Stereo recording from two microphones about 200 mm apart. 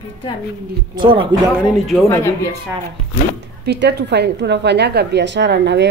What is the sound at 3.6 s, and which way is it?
Speech, 55° right (ahead or behind).